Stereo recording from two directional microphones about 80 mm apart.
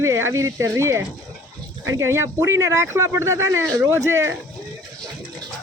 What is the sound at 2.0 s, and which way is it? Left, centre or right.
Speech, right.